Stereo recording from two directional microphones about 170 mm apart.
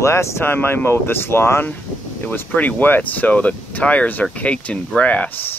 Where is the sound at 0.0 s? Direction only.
15° left (ahead or behind).